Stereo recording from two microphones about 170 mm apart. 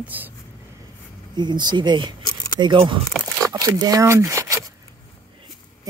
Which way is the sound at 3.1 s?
Centre (ahead or behind).